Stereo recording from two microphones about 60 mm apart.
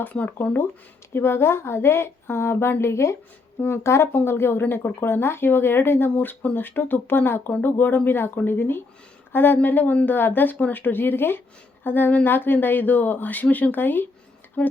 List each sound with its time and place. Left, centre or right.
0.0 s a woman's voice: left
14.6 s speech: left